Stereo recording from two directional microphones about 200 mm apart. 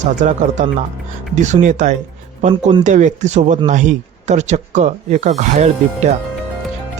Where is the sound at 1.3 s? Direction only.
35° right (ahead or behind).